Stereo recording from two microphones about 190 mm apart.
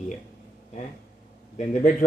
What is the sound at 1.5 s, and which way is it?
Speech, 40° left (ahead or behind).